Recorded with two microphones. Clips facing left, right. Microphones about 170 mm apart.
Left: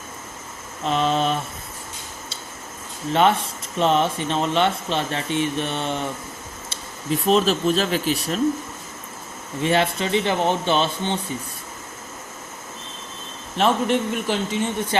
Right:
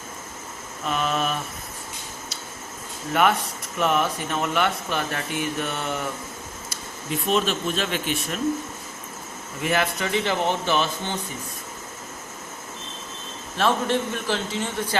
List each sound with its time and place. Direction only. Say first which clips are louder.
0.9 s a sound: left 4 dB; 25° left (ahead or behind)
3.1 s speech: left 3 dB; 25° left (ahead or behind)
7.3 s speech: left 5 dB; 35° left (ahead or behind)
9.6 s speech: left 4 dB; 30° left (ahead or behind)
13.6 s a man's voice: left 3 dB; 20° left (ahead or behind)